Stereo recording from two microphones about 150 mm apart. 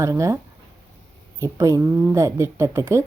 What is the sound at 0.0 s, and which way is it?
Speech, 20° right (ahead or behind).